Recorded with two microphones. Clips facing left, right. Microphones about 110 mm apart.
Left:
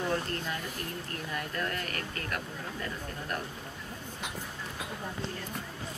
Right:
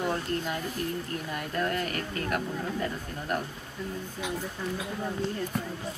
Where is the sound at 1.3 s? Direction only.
20° right (ahead or behind).